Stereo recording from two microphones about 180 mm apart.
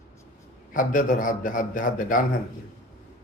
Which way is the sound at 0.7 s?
45° left (ahead or behind).